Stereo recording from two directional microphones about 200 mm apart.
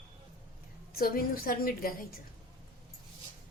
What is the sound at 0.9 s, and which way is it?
A woman's voice, 45° left (ahead or behind).